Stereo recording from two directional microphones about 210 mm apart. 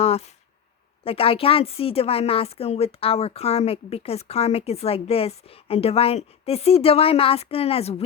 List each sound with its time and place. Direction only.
1.0 s a woman's voice: 25° left (ahead or behind)